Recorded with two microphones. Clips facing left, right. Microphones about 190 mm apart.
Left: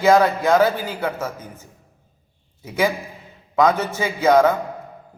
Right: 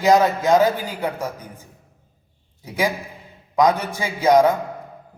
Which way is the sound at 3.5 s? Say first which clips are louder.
Even; 15° right (ahead or behind).